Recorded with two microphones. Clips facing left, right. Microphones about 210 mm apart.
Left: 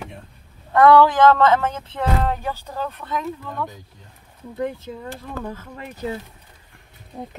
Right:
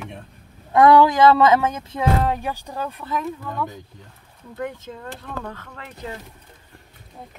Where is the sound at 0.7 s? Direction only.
15° right (ahead or behind).